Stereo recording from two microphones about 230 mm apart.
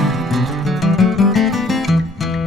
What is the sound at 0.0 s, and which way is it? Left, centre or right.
Music, centre.